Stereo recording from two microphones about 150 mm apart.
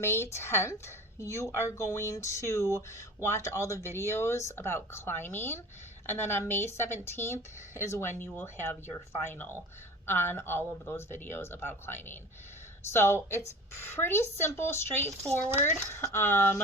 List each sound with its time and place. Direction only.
0.0 s speech: 15° left (ahead or behind)